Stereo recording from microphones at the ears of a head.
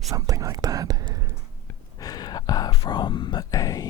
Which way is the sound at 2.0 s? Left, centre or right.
Left.